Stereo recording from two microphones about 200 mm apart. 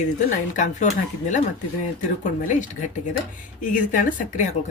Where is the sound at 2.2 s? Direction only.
40° left (ahead or behind).